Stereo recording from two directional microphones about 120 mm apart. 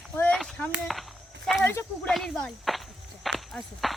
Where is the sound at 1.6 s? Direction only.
20° left (ahead or behind).